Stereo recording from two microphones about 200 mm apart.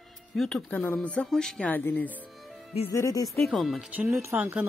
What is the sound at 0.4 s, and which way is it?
Speech, 5° left (ahead or behind).